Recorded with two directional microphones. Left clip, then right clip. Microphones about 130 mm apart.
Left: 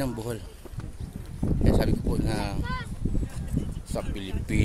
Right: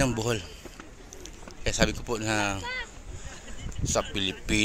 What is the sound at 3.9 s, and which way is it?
Speech, 10° right (ahead or behind).